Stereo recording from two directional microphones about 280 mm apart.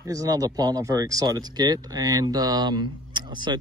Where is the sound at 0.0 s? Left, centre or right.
Centre.